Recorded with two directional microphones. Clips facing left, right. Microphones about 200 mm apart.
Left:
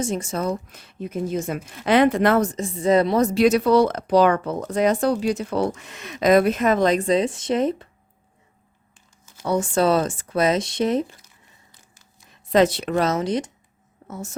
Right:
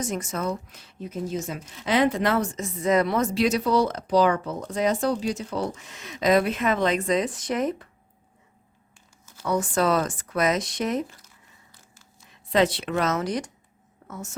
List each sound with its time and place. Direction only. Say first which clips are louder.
0.0 s speech: left 4 dB; 30° left (ahead or behind)
0.7 s speech: left 5 dB; 55° left (ahead or behind)
2.4 s speech: left 4 dB; 35° left (ahead or behind)
3.4 s speech: left 6 dB; 55° left (ahead or behind); by 7.9 s 30° left (ahead or behind)
9.5 s speech: left 4 dB; 30° left (ahead or behind)
12.5 s speech: left 4 dB; 45° left (ahead or behind)